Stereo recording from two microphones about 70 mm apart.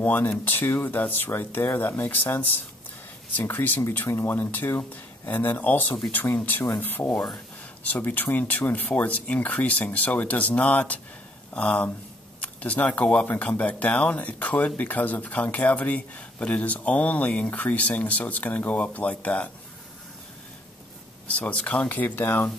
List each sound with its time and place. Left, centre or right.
0.0 s speech: left
7.1 s speech: centre
7.8 s speech: left
21.3 s speech: centre